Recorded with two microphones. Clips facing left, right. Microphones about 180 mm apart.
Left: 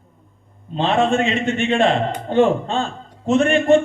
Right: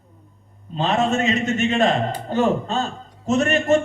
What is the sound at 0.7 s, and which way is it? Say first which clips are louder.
A man's voice: left 3 dB; 40° right (ahead or behind).